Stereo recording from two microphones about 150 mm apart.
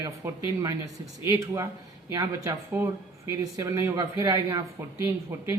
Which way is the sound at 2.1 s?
20° right (ahead or behind).